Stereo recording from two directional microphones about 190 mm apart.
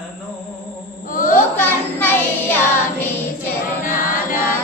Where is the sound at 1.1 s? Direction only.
45° left (ahead or behind).